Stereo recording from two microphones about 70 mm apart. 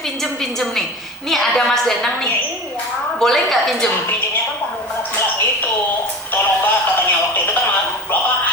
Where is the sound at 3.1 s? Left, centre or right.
Centre.